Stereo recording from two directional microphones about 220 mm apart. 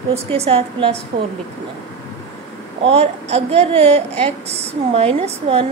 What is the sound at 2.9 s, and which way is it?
A woman's voice, 30° right (ahead or behind).